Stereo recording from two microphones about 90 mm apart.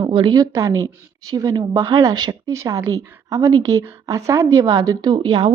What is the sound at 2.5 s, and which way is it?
A woman's voice, 30° right (ahead or behind).